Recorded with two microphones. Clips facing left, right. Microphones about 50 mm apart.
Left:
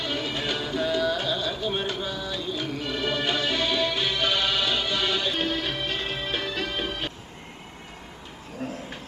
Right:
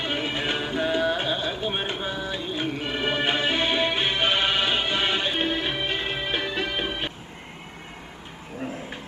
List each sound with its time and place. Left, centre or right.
0.0 s music: right
8.5 s cat: right